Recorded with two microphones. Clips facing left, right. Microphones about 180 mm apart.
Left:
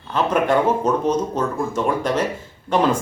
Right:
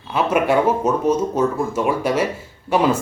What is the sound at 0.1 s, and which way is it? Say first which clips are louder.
A man's voice: right 1 dB; 10° right (ahead or behind).